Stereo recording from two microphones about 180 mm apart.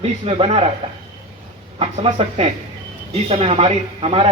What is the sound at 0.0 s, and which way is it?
Speech, 35° right (ahead or behind).